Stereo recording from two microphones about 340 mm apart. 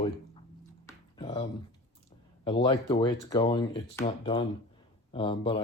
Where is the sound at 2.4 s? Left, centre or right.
Centre.